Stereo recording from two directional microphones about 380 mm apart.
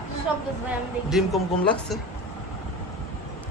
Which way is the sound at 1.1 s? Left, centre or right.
Centre.